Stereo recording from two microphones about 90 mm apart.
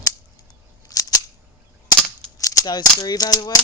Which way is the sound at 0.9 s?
45° left (ahead or behind).